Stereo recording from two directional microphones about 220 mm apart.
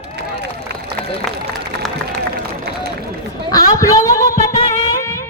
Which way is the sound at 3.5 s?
15° left (ahead or behind).